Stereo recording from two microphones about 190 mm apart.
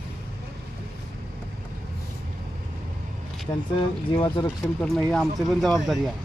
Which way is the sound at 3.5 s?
15° left (ahead or behind).